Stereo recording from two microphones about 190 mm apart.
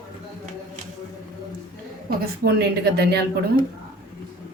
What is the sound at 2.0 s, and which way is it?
A woman's voice, 55° right (ahead or behind).